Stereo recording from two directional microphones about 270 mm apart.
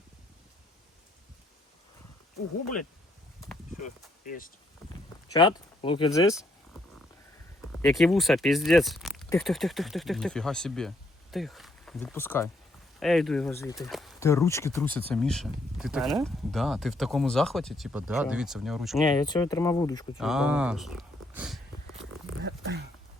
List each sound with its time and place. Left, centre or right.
3.8 s speech: left
4.9 s a sound: centre
7.8 s speech: centre
19.2 s speech: centre
20.1 s speech: centre
22.4 s a sound: right